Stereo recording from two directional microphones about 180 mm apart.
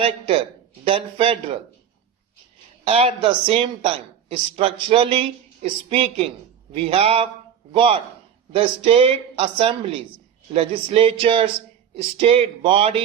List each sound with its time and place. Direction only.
0.0 s speech: 30° right (ahead or behind)
2.8 s a man's voice: 35° right (ahead or behind)